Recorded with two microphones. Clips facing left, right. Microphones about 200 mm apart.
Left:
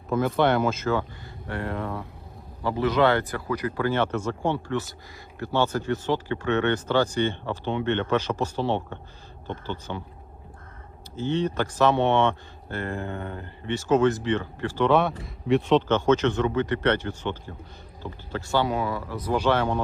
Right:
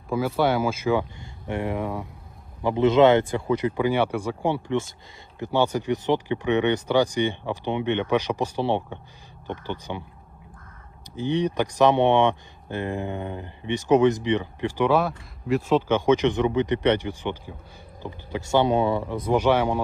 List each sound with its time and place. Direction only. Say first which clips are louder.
0.1 s speech: left 1 dB; 5° right (ahead or behind)
11.2 s speech: right 2 dB; 15° right (ahead or behind)
15.2 s a man's voice: left 2 dB; centre (ahead or behind)
15.9 s speech: right 1 dB; 10° right (ahead or behind)